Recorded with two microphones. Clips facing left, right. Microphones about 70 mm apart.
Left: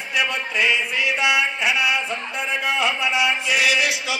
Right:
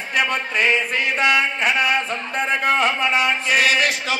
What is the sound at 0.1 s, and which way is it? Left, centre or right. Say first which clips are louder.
Mantra: right 2 dB; right.